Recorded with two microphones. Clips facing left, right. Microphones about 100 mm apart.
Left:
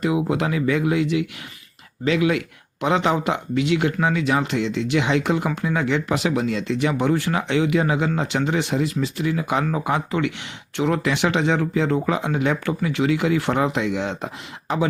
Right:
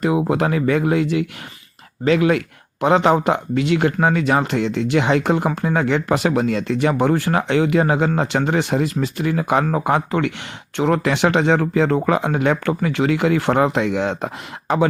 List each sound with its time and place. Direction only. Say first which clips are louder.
0.0 s speech: right 3 dB; 45° right (ahead or behind)